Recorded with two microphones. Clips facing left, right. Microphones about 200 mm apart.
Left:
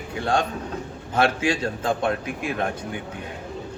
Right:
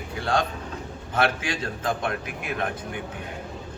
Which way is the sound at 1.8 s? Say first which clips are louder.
Left 4 dB; 30° left (ahead or behind).